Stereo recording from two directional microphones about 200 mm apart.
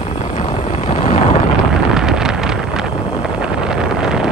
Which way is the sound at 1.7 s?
5° right (ahead or behind).